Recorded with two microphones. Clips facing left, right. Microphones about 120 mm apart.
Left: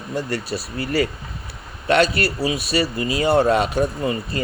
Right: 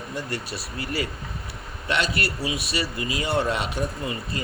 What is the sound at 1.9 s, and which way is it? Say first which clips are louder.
Speech: left 8 dB; 45° left (ahead or behind).